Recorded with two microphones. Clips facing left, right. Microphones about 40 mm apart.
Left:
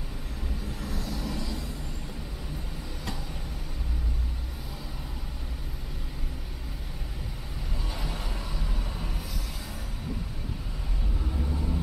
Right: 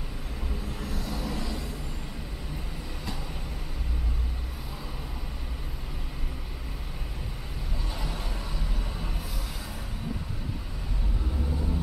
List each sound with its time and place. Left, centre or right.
0.7 s vehicle: centre
7.9 s vehicle: centre
11.3 s vehicle: centre